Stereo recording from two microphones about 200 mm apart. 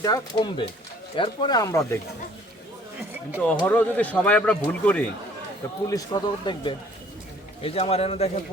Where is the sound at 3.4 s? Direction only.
5° left (ahead or behind).